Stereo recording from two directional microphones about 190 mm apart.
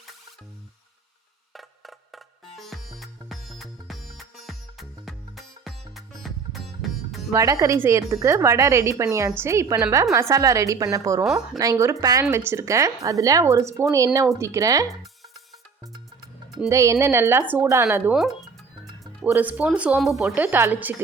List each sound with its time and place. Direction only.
1.5 s music: centre (ahead or behind)
7.3 s speech: 15° right (ahead or behind)
16.6 s speech: 15° right (ahead or behind)
18.1 s speech: centre (ahead or behind)